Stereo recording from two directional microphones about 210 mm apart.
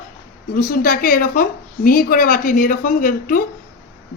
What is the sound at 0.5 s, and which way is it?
A woman's voice, 40° left (ahead or behind).